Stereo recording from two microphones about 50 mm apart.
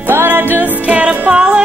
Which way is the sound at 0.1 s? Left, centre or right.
Right.